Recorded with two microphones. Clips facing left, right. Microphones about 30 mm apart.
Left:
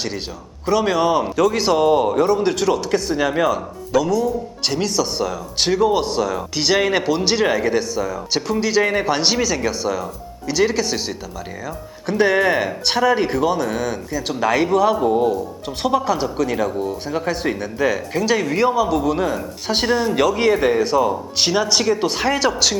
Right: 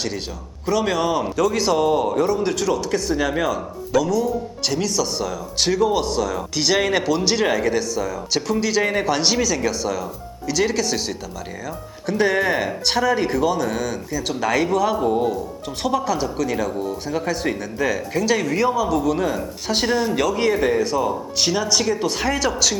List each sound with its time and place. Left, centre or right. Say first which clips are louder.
0.6 s a man's voice: left 3 dB; centre
12.0 s a man's voice: left 3 dB; centre
15.8 s a man's voice: left 3 dB; centre
20.1 s a man's voice: left 3 dB; centre